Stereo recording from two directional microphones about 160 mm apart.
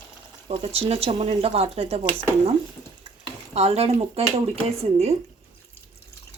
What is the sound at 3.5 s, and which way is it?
Speech, 40° right (ahead or behind).